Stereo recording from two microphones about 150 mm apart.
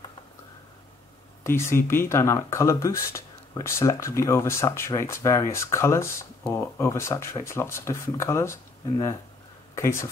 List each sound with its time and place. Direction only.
1.4 s speech: 15° left (ahead or behind)
9.8 s speech: 20° left (ahead or behind)